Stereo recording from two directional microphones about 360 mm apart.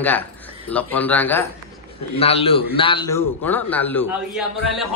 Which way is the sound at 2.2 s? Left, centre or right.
Centre.